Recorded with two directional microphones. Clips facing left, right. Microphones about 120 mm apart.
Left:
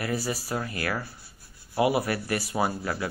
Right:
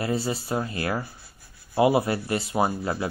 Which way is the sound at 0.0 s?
25° right (ahead or behind).